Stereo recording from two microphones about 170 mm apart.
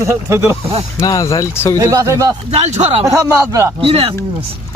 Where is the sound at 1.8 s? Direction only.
20° right (ahead or behind).